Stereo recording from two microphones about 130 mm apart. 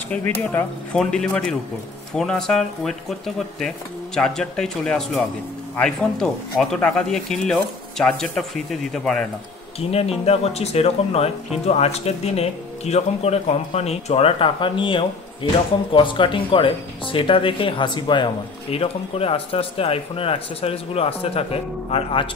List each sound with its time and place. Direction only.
0.1 s speech: 15° left (ahead or behind)
9.8 s speech: 50° left (ahead or behind)